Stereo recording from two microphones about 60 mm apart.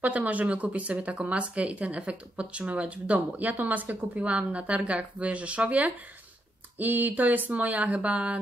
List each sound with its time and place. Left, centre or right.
0.0 s speech: right